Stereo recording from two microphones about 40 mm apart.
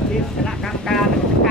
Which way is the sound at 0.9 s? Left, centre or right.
Centre.